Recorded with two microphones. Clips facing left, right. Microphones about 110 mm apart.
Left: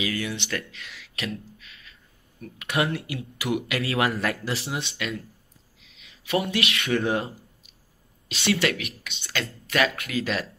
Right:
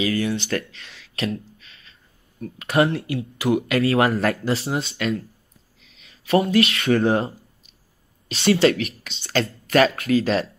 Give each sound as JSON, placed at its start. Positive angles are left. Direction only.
{"t": 0.0, "sound": "music", "side_deg": -35}
{"t": 2.6, "sound": "speech", "side_deg": -35}